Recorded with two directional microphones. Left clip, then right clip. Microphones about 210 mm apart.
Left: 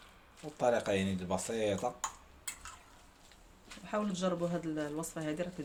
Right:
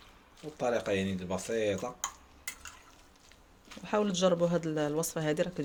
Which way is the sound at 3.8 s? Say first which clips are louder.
Right 7 dB; 45° right (ahead or behind).